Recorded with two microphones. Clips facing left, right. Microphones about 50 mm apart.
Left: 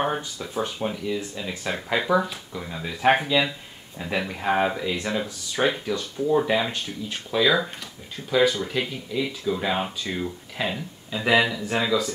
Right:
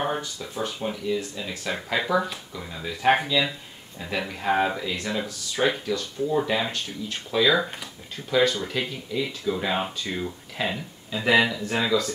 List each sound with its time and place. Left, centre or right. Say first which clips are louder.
0.0 s speech: left 2 dB; centre